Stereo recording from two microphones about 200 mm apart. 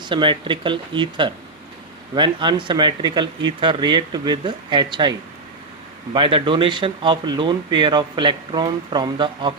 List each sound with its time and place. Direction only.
0.0 s speech: 25° right (ahead or behind)
6.1 s speech: 25° right (ahead or behind)